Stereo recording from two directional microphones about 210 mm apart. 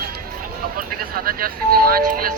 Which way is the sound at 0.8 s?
45° right (ahead or behind).